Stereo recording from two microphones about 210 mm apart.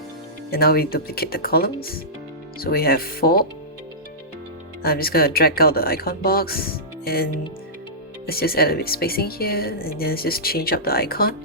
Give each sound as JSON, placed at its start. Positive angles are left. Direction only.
{"t": 0.5, "sound": "speech", "side_deg": 45}
{"t": 4.8, "sound": "speech", "side_deg": 45}
{"t": 8.3, "sound": "speech", "side_deg": 45}